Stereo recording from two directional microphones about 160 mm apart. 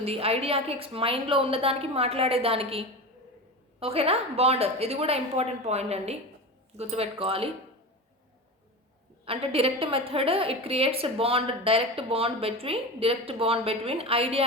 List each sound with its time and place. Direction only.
0.0 s a woman's voice: 40° right (ahead or behind)
9.2 s a woman's voice: 35° right (ahead or behind)